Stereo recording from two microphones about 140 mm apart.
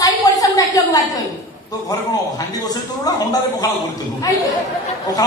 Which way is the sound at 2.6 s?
25° left (ahead or behind).